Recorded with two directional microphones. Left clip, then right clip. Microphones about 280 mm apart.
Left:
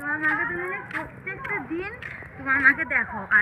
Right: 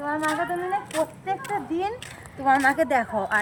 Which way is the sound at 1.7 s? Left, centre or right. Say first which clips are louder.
Right 4 dB; centre.